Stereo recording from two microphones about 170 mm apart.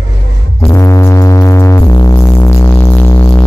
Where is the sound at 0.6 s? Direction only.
20° left (ahead or behind).